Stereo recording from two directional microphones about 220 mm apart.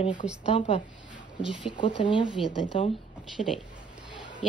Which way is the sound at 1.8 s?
20° left (ahead or behind).